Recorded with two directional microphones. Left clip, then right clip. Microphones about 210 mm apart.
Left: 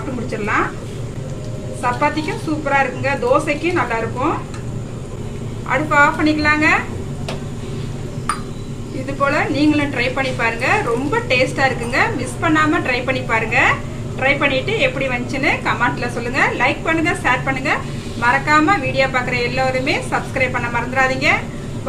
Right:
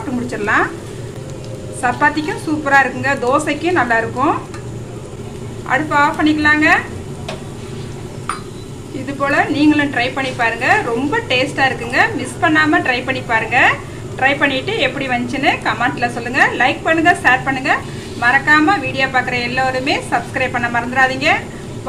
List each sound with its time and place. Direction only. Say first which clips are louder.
2.5 s speech: right 5 dB; 25° right (ahead or behind)
5.6 s speech: even; 10° right (ahead or behind)
9.2 s speech: right 2 dB; 10° right (ahead or behind)